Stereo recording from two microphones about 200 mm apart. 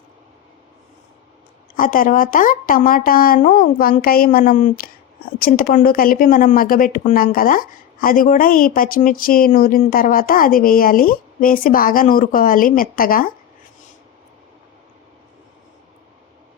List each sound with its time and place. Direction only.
1.7 s speech: 45° left (ahead or behind)